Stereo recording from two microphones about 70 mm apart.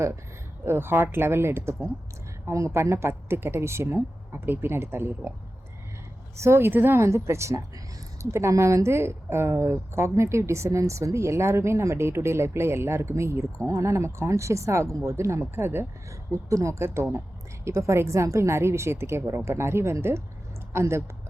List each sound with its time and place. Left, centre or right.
0.6 s a woman's voice: right
6.4 s a woman's voice: right